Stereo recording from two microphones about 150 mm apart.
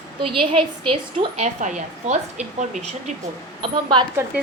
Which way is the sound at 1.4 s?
50° right (ahead or behind).